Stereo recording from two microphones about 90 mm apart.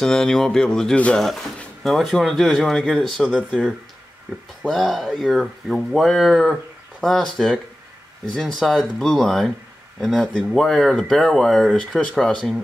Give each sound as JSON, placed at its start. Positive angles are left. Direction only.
{"t": 0.0, "sound": "speech", "side_deg": 5}
{"t": 4.6, "sound": "speech", "side_deg": 0}